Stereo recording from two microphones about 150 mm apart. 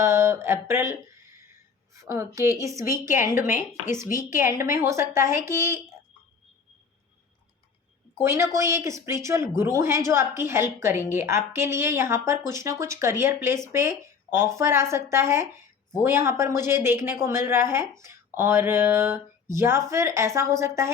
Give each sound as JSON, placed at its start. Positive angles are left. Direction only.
{"t": 0.0, "sound": "speech", "side_deg": -15}
{"t": 2.0, "sound": "speech", "side_deg": -20}
{"t": 8.2, "sound": "speech", "side_deg": -20}